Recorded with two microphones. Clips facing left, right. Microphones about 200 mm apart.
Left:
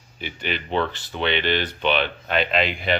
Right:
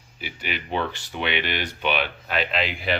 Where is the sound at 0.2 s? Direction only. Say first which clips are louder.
Left 3 dB; 10° right (ahead or behind).